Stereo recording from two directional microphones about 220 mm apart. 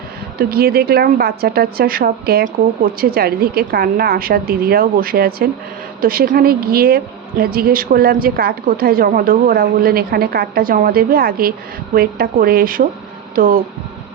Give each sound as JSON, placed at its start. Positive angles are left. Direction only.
{"t": 0.3, "sound": "a woman's voice", "side_deg": -45}